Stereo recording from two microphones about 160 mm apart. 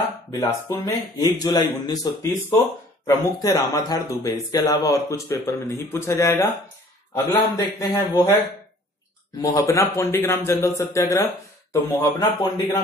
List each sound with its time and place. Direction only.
0.3 s speech: 20° left (ahead or behind)
9.4 s speech: 20° left (ahead or behind)